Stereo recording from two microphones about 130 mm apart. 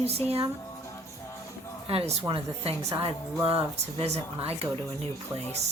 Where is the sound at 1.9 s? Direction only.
50° right (ahead or behind).